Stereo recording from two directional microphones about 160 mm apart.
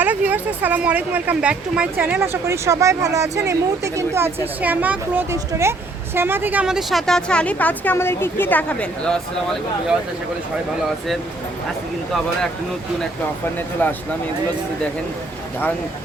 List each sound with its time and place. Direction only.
0.0 s a woman's voice: 10° right (ahead or behind)
13.8 s speech: 10° left (ahead or behind)